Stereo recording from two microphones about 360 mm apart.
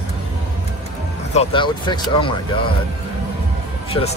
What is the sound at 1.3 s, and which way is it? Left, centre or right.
Speech, centre.